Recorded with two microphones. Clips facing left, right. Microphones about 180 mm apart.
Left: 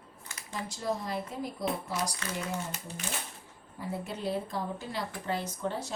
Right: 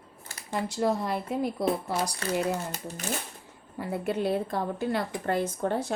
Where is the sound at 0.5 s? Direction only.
65° right (ahead or behind).